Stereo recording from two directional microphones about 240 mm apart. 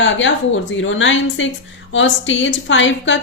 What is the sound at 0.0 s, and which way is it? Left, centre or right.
A woman's voice, left.